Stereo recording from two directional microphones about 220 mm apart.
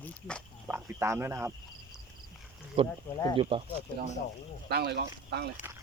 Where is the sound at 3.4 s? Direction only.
25° right (ahead or behind).